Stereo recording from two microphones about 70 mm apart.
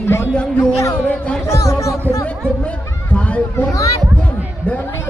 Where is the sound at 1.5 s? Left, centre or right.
Left.